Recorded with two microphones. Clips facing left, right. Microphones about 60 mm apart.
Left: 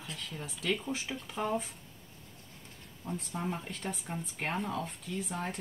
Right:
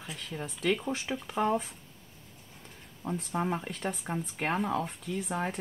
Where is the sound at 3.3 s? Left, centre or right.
Right.